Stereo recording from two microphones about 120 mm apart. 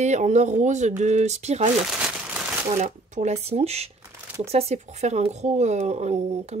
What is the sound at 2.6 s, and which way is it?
Speech, 80° right.